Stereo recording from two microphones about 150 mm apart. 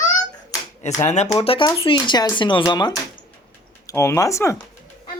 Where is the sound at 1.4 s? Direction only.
40° left (ahead or behind).